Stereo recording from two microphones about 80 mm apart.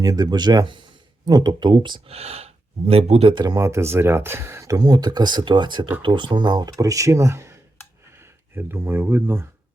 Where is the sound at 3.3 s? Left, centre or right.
Right.